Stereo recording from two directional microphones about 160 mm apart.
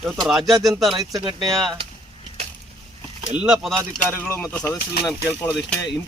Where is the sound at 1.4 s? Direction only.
Centre (ahead or behind).